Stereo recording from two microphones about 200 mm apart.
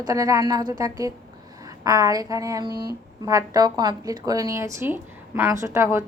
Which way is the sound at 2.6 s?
50° right (ahead or behind).